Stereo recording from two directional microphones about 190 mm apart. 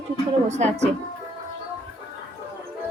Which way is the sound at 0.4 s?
35° right (ahead or behind).